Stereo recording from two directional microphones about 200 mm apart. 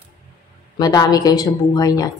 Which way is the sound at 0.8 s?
20° left (ahead or behind).